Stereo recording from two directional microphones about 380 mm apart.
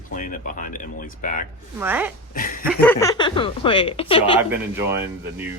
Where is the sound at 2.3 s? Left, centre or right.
Left.